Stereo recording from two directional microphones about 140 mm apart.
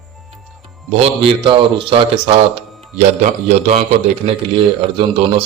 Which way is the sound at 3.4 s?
50° right (ahead or behind).